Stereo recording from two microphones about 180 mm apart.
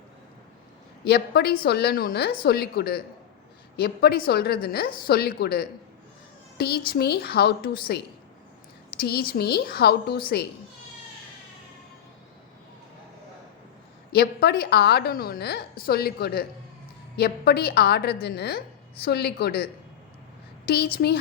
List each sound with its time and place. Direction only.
1.0 s a woman's voice: 65° left (ahead or behind)
9.0 s a woman's voice: 60° left (ahead or behind)
14.1 s a woman's voice: 60° left (ahead or behind)